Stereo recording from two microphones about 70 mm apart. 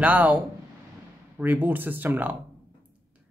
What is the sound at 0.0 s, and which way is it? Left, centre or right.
Speech, right.